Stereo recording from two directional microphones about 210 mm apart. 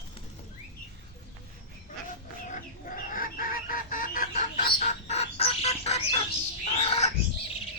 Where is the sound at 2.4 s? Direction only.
40° left (ahead or behind).